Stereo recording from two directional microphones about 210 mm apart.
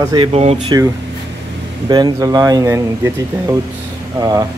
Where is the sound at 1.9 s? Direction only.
20° right (ahead or behind).